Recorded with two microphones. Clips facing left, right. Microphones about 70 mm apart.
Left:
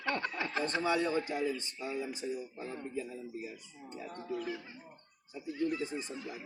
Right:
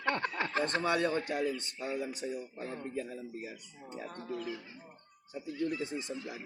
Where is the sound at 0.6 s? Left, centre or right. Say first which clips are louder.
Right 1 dB; right.